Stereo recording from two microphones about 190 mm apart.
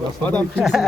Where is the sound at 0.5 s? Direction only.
Centre (ahead or behind).